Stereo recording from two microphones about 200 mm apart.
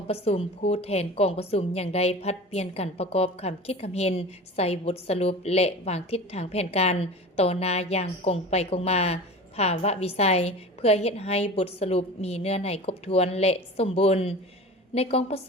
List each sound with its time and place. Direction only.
0.1 s a woman's voice: 30° left (ahead or behind)